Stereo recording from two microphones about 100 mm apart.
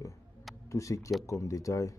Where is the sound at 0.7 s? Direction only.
30° left (ahead or behind).